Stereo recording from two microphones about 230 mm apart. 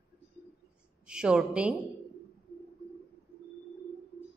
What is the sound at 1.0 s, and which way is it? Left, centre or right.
Speech, centre.